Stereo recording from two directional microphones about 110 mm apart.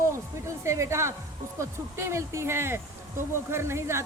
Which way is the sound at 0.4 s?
25° right (ahead or behind).